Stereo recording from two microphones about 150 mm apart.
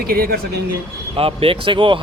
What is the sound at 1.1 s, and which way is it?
Speech, 40° right (ahead or behind).